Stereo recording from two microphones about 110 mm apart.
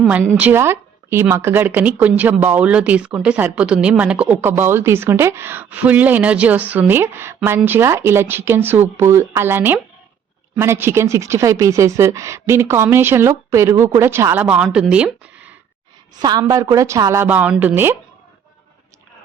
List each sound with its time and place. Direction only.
0.3 s speech: 15° right (ahead or behind)
14.4 s speech: 10° right (ahead or behind)
16.2 s a woman's voice: 35° right (ahead or behind)
17.2 s speech: 15° right (ahead or behind)